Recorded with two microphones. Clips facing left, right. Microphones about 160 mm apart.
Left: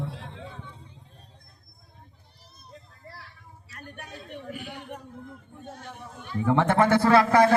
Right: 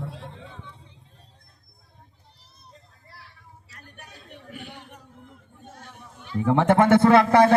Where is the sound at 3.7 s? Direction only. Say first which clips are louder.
Left 7 dB; 55° left (ahead or behind).